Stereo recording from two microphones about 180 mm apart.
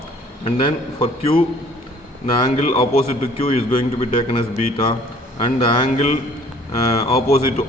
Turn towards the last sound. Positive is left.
turn(degrees=35)  # may be behind; listen again after turning